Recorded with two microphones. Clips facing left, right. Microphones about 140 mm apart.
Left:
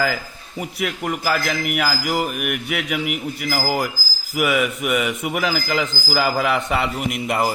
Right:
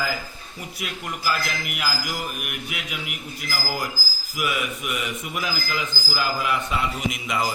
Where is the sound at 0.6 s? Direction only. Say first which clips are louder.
Left 9 dB; 60° left (ahead or behind).